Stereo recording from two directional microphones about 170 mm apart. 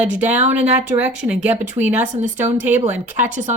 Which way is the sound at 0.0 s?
10° right (ahead or behind).